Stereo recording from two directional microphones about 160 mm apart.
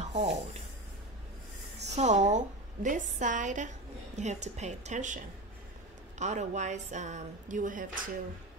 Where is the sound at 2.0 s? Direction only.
45° right (ahead or behind).